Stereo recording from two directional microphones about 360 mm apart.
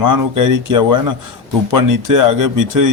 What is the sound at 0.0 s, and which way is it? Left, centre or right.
Speech, right.